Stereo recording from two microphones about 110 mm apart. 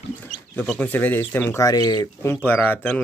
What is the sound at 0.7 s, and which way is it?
Speech, 15° left (ahead or behind).